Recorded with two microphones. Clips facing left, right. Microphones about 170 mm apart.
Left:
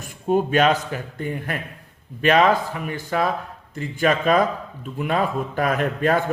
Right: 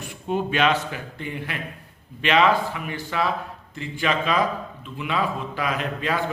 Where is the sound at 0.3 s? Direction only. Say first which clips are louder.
Left 4 dB; 45° left (ahead or behind).